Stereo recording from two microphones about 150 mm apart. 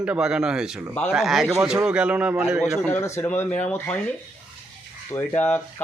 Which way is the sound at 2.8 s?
15° left (ahead or behind).